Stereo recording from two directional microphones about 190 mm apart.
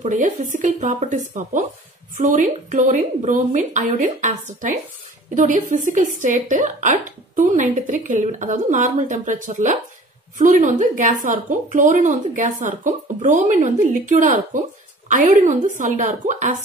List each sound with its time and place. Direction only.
0.0 s a woman's voice: 45° right (ahead or behind)